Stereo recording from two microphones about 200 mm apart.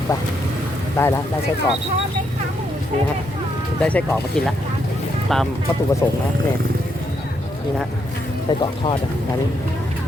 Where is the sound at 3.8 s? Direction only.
5° left (ahead or behind).